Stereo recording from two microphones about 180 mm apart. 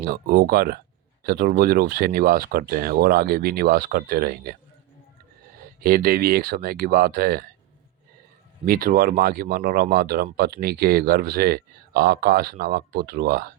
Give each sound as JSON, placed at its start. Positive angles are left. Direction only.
{"t": 0.0, "sound": "speech", "side_deg": -60}
{"t": 5.5, "sound": "speech", "side_deg": -55}
{"t": 8.6, "sound": "speech", "side_deg": -50}